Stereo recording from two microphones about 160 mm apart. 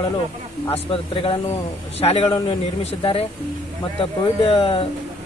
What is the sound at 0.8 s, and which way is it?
Speech, 35° left (ahead or behind).